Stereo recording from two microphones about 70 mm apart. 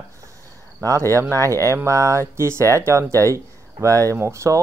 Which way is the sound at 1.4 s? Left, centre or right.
Right.